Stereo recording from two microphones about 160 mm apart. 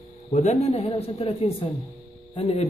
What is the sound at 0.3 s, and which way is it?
A man's voice, 45° left (ahead or behind).